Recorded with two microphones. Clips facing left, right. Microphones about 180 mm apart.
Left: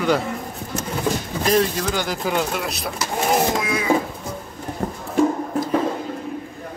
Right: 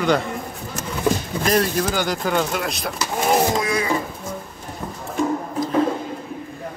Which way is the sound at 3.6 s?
5° left (ahead or behind).